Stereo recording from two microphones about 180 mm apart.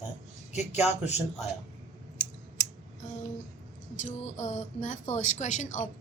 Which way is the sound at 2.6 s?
20° left (ahead or behind).